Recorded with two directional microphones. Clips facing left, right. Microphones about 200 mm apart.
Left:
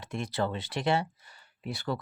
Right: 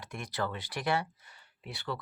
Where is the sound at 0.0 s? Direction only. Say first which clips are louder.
Left 5 dB; 25° left (ahead or behind).